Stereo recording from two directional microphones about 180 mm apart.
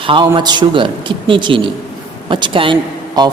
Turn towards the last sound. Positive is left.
turn(degrees=-20)  # may be behind; listen again after turning